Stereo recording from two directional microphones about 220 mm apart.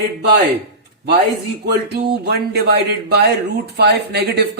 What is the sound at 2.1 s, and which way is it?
Speech, 45° right (ahead or behind).